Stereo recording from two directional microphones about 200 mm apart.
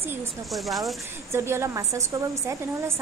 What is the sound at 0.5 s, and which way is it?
Speech, centre (ahead or behind).